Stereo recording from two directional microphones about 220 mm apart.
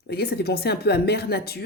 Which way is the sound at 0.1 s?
45° left (ahead or behind).